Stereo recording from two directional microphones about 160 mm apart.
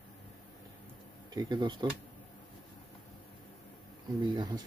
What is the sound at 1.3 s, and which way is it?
Speech, 30° right (ahead or behind).